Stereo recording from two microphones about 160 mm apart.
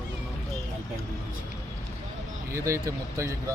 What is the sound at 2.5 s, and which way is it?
Speech, 20° right (ahead or behind).